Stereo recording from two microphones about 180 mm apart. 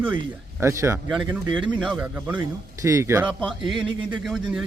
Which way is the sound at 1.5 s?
25° right (ahead or behind).